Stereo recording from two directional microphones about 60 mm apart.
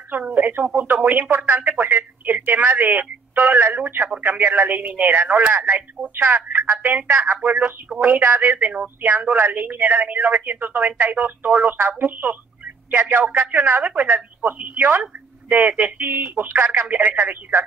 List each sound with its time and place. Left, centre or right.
0.1 s speech: right
6.1 s a woman's voice: right